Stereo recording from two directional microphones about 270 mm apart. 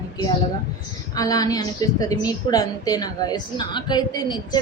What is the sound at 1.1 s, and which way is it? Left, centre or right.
A woman's voice, centre.